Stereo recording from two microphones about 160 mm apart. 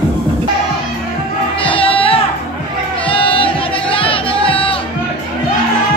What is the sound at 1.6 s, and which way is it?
Music, 35° left (ahead or behind).